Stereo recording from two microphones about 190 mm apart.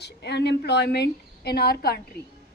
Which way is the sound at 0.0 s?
60° left (ahead or behind).